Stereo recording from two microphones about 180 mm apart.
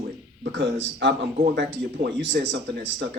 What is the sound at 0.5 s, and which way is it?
Speech, 75° right (ahead or behind).